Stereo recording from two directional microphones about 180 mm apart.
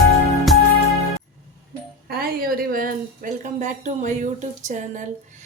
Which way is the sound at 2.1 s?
55° right (ahead or behind).